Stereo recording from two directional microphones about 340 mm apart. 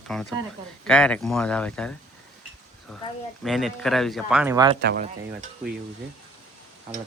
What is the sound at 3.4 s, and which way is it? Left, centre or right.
Speech, centre.